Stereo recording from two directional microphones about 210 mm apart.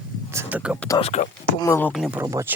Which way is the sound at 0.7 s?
15° left (ahead or behind).